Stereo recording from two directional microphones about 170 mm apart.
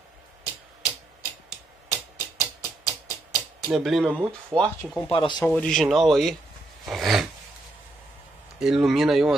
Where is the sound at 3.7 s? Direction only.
Centre (ahead or behind).